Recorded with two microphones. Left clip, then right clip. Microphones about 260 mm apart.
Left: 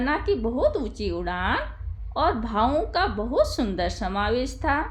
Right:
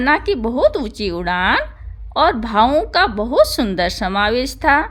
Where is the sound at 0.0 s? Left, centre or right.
Right.